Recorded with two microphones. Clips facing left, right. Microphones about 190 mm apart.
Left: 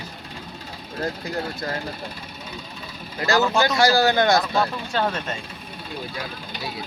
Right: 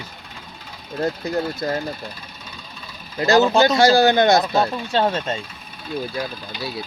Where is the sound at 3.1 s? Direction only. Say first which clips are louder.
Right 5 dB; 20° right (ahead or behind).